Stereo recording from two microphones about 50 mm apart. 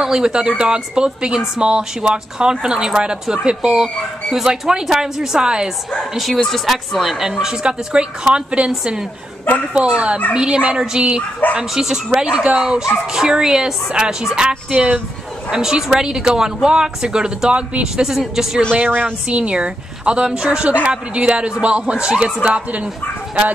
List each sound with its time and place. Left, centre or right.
0.0 s a man's voice: centre
3.8 s speech: centre
5.9 s a man's voice: centre; by 18.0 s right
18.0 s speech: centre
18.7 s a man's voice: right